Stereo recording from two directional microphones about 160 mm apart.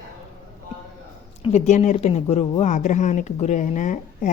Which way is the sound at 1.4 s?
40° left (ahead or behind).